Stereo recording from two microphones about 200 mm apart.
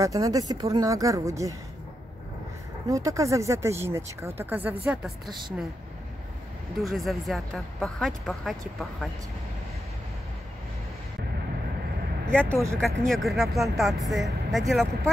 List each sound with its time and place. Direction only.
0.0 s speech: 15° right (ahead or behind)
2.9 s speech: 15° right (ahead or behind)
6.8 s speech: centre (ahead or behind)
12.3 s speech: 5° left (ahead or behind)
12.5 s speech: 15° right (ahead or behind)
12.8 s speech: centre (ahead or behind)